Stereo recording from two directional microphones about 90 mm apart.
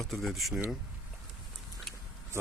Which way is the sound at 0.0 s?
Centre (ahead or behind).